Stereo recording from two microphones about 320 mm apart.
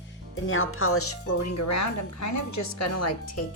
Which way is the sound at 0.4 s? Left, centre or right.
Left.